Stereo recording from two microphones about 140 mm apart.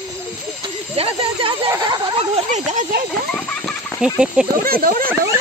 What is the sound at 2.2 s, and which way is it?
Speech, 50° right (ahead or behind).